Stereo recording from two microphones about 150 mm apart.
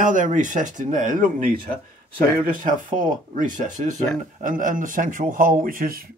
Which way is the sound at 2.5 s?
65° right (ahead or behind).